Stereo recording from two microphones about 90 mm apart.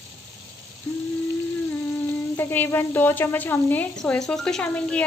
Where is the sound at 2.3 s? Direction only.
20° left (ahead or behind).